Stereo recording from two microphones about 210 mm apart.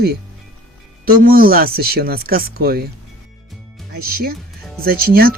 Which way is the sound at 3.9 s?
45° right (ahead or behind).